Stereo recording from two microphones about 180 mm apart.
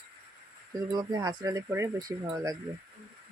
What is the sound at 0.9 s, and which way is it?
Speech, 20° right (ahead or behind).